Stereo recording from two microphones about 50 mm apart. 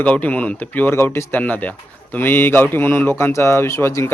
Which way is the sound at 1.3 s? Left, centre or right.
Left.